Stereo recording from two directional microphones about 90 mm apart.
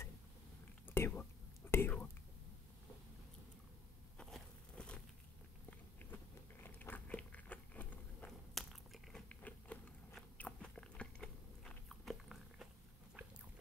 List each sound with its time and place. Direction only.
0.8 s whispering: 25° left (ahead or behind)
4.2 s a sound: 10° left (ahead or behind)
6.6 s biting: 20° left (ahead or behind)
8.3 s biting: centre (ahead or behind)
9.3 s a sound: 15° left (ahead or behind)
10.3 s biting: 15° left (ahead or behind); by 12.6 s centre (ahead or behind)